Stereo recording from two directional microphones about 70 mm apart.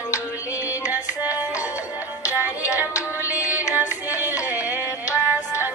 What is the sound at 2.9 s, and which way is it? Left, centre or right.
Music, left.